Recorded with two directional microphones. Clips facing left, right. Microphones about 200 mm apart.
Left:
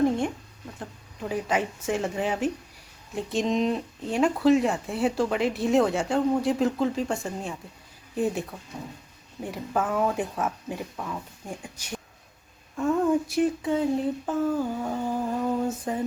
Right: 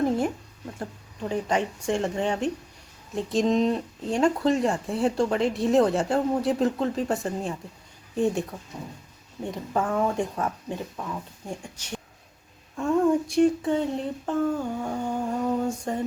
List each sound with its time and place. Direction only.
1.2 s speech: 5° left (ahead or behind)